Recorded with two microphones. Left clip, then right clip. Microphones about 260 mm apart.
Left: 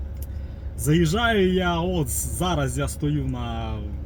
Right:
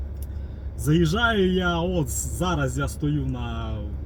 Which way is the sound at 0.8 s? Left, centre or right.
Centre.